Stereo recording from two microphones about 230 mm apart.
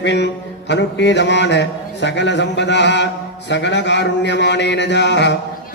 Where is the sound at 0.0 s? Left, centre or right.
Left.